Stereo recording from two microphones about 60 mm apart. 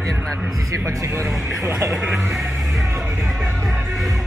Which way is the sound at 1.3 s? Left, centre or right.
Centre.